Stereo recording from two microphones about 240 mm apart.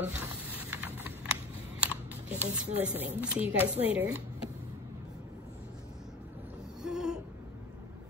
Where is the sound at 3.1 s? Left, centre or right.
Centre.